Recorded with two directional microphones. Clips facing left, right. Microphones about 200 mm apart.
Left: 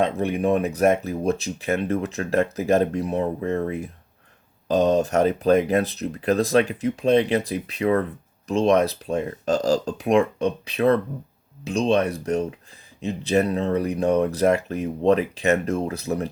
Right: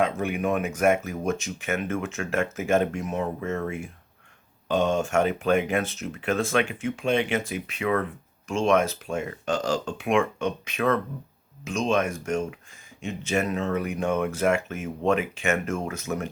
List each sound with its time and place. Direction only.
0.0 s speech: 35° left (ahead or behind)